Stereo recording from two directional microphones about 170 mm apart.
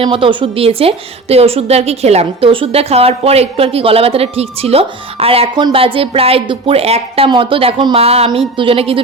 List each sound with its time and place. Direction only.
0.0 s a woman's voice: 30° right (ahead or behind)